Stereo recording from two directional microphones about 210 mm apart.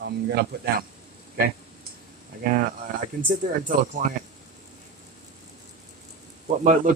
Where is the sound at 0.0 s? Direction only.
55° right (ahead or behind).